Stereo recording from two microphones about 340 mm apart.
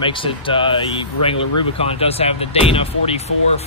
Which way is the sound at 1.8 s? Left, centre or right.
Centre.